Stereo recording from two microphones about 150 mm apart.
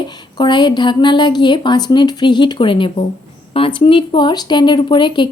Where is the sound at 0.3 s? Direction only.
30° left (ahead or behind).